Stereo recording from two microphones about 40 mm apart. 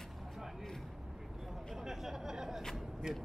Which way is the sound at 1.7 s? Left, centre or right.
Centre.